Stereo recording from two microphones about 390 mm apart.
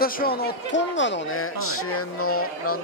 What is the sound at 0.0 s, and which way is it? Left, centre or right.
Speech, left.